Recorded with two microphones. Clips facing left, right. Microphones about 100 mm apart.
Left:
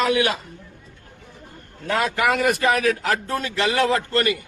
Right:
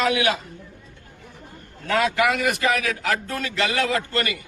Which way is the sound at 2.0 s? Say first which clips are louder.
Left 2 dB; 35° left (ahead or behind).